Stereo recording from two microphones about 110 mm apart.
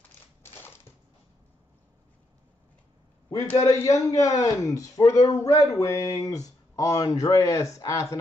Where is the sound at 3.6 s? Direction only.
30° left (ahead or behind).